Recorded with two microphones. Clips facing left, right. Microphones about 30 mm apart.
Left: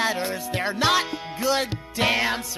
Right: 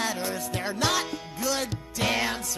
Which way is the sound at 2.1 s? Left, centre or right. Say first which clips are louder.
Left 2 dB; centre.